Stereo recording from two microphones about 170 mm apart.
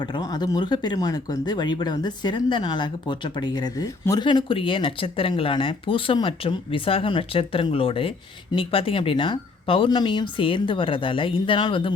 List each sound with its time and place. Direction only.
0.0 s speech: 25° left (ahead or behind)